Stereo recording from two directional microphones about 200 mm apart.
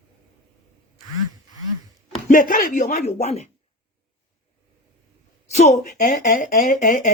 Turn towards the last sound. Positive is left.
turn(degrees=40)  # may be behind; listen again after turning